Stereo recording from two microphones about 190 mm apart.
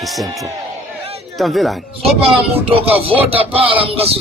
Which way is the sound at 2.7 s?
30° right (ahead or behind).